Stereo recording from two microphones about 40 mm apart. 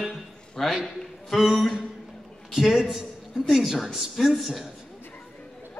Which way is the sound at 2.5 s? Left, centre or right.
Centre.